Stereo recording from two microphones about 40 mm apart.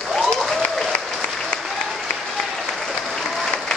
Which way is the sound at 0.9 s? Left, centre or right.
Left.